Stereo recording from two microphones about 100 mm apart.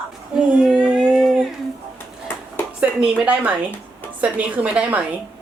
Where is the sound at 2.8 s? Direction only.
10° right (ahead or behind).